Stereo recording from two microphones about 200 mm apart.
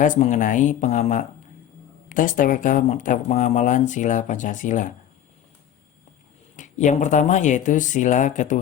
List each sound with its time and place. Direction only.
0.0 s speech: 40° left (ahead or behind)
6.6 s speech: 40° left (ahead or behind)